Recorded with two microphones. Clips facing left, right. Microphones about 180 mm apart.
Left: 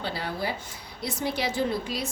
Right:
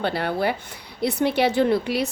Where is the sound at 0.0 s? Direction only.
60° right (ahead or behind).